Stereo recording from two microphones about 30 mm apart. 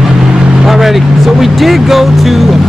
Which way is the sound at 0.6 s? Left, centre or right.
Centre.